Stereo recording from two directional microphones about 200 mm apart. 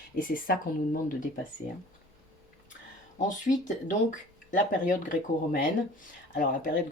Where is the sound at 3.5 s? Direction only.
40° left (ahead or behind).